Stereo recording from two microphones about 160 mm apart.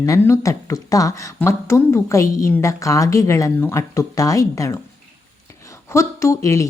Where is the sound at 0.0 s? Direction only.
20° left (ahead or behind).